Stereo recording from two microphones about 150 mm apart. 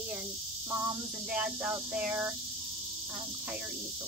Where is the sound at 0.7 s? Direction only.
15° right (ahead or behind).